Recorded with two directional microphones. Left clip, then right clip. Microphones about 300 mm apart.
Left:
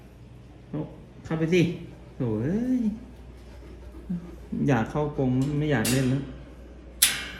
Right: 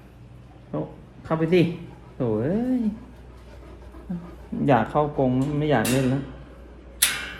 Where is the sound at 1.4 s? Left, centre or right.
Centre.